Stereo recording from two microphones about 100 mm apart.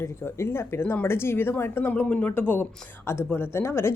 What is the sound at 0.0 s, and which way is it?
Speech, 25° left (ahead or behind).